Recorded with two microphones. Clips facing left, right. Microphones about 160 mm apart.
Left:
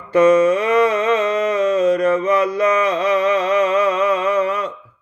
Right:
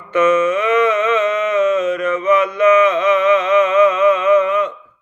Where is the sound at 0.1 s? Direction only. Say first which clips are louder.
Left 2 dB; 35° left (ahead or behind).